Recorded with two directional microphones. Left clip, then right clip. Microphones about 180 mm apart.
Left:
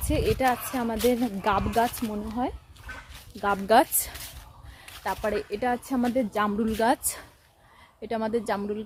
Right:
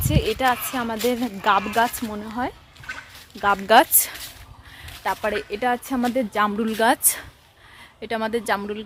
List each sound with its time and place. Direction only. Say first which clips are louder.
0.1 s a woman's voice: right 3 dB; centre (ahead or behind)